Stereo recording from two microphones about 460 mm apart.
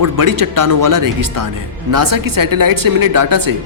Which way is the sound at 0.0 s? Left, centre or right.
Right.